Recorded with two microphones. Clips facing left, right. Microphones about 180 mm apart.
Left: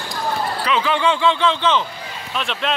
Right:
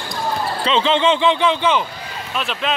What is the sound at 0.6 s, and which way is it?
A man's voice, 25° right (ahead or behind).